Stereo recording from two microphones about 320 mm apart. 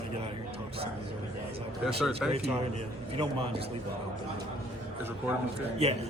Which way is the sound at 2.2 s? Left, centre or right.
Centre.